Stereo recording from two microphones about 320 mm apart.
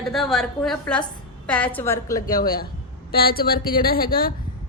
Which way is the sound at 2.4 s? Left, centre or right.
Left.